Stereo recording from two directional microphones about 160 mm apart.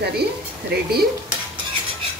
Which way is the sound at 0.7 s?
90° right.